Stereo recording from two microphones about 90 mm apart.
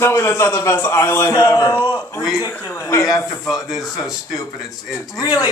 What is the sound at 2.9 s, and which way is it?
Speech, 35° left (ahead or behind).